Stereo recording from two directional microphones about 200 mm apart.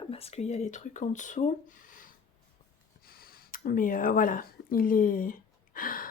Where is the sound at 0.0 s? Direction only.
30° left (ahead or behind).